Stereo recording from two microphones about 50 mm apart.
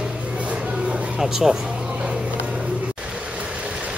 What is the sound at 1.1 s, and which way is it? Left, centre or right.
Speech, centre.